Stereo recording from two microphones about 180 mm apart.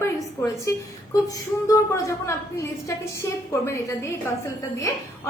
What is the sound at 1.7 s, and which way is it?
A woman's voice, 20° left (ahead or behind).